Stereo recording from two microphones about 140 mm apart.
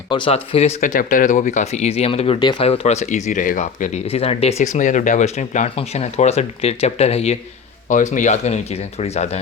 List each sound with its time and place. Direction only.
0.1 s speech: 40° left (ahead or behind)
0.8 s speech: 70° left (ahead or behind); by 2.4 s 45° left (ahead or behind)
2.4 s speech: 30° left (ahead or behind)
2.6 s speech: 50° left (ahead or behind)
4.0 s speech: 45° left (ahead or behind)
7.9 s speech: 65° left (ahead or behind); by 9.4 s 50° left (ahead or behind)